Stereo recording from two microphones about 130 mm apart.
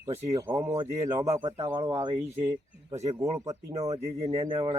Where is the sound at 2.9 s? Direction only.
55° right (ahead or behind).